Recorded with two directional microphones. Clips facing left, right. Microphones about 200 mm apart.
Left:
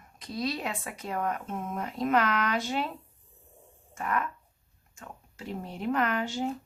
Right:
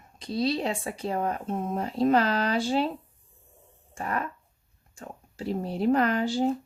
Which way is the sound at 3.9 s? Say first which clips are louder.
Even; 30° right (ahead or behind).